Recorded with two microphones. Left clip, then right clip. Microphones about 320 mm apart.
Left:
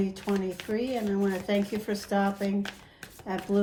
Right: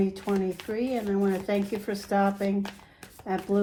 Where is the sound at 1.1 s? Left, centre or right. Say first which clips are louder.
Right 2 dB; right.